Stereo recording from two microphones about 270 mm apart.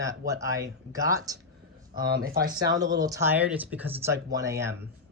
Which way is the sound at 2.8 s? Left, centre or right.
Centre.